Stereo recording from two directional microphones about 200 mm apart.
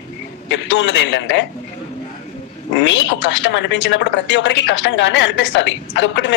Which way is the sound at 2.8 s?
65° left (ahead or behind).